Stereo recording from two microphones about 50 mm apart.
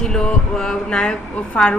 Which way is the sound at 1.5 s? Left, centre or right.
Left.